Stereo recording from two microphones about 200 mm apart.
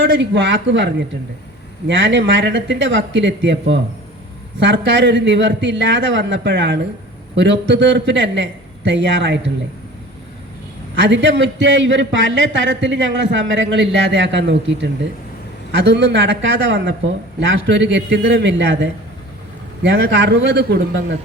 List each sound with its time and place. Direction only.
0.0 s a man's voice: 60° right (ahead or behind)
1.9 s a man's voice: 65° right (ahead or behind)
10.9 s a man's voice: 65° right (ahead or behind)